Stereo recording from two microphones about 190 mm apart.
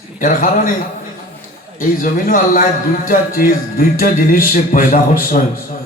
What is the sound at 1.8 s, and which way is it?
A man's voice, 45° left (ahead or behind).